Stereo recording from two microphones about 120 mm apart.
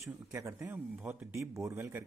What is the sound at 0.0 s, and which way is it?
Speech, 25° right (ahead or behind).